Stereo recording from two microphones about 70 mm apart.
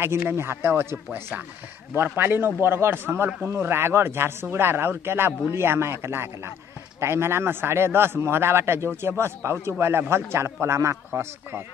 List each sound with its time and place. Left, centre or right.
0.0 s a man's voice: right